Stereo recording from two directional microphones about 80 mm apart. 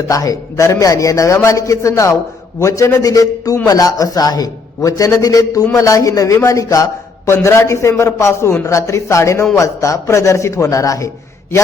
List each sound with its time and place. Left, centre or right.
0.1 s a man's voice: left